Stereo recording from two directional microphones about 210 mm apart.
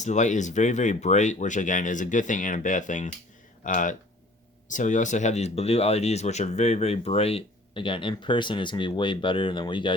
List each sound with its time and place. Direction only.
0.0 s speech: 35° left (ahead or behind)